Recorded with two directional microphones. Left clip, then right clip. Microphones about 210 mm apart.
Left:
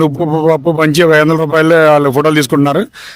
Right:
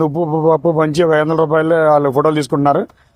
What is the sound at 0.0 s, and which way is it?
A man's voice, 45° left (ahead or behind).